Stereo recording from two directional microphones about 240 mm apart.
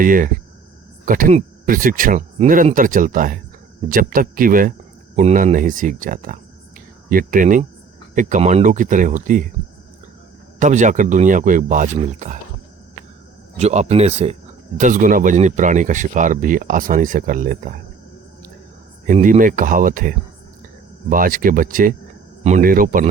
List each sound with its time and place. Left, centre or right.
0.0 s speech: right
10.6 s speech: right
13.6 s speech: right
19.0 s speech: right